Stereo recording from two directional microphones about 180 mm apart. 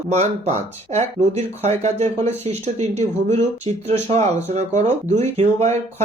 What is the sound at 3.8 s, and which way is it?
Speech, 35° right (ahead or behind).